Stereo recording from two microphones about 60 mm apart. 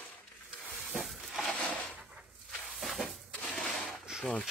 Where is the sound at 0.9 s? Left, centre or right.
Centre.